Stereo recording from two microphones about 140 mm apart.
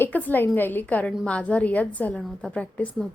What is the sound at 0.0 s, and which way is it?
Speech, 10° left (ahead or behind).